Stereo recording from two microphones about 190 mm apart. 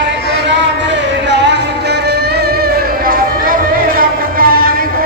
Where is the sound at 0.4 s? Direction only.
70° right (ahead or behind).